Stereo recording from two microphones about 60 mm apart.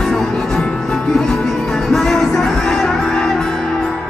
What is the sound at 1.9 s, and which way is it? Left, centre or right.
Music, centre.